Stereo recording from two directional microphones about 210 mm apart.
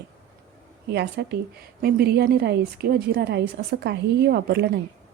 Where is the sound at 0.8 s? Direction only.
50° right (ahead or behind).